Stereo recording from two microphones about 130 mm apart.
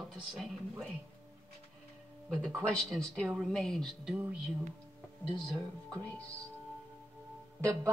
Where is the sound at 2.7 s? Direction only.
5° left (ahead or behind).